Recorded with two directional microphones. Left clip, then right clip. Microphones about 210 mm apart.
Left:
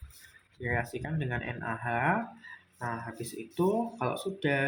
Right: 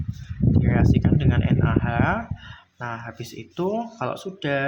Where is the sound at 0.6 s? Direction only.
25° right (ahead or behind).